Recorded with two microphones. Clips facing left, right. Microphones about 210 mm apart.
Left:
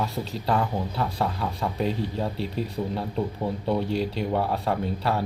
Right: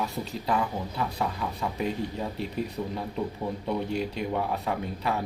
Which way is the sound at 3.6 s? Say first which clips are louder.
Left 4 dB; 30° left (ahead or behind).